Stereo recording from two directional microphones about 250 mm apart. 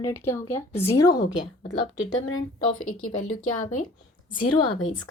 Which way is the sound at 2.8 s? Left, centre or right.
Left.